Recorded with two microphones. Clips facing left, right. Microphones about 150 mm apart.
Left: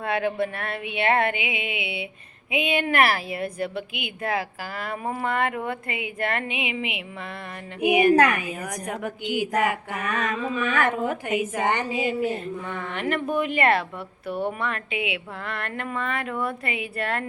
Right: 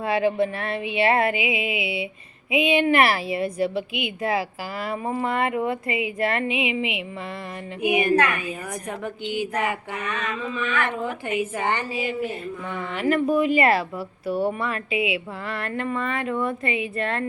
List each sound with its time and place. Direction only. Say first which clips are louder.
0.0 s a woman's voice: right 3 dB; centre (ahead or behind)
7.8 s a woman's voice: left 3 dB; 15° left (ahead or behind)
10.1 s a woman's voice: left 3 dB; 45° left (ahead or behind)
11.3 s a woman's voice: right 1 dB; 15° left (ahead or behind)
12.7 s a woman's voice: right 6 dB; 5° right (ahead or behind)